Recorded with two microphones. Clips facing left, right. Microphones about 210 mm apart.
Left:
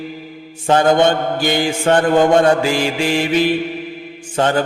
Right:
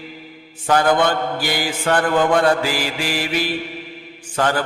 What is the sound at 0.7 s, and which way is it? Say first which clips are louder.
Mantra: left 4 dB; 25° left (ahead or behind).